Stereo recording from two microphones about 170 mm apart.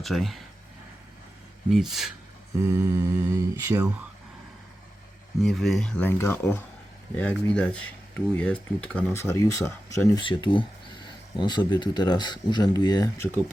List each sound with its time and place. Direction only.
0.0 s speech: centre (ahead or behind)
1.7 s speech: centre (ahead or behind)
2.9 s a sound: 15° right (ahead or behind)
5.4 s speech: centre (ahead or behind); by 10.2 s 15° left (ahead or behind)
10.2 s speech: 30° left (ahead or behind)